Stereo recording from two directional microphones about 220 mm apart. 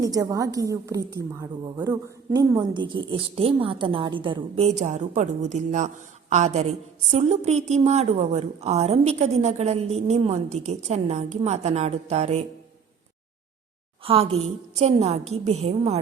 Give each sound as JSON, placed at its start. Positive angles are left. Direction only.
{"t": 0.0, "sound": "a woman's voice", "side_deg": -15}
{"t": 14.0, "sound": "a woman's voice", "side_deg": -25}